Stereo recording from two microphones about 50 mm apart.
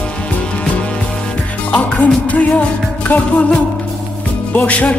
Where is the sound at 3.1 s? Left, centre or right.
Left.